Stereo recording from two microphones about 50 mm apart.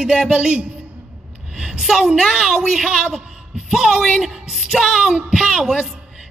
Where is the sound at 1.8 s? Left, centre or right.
Centre.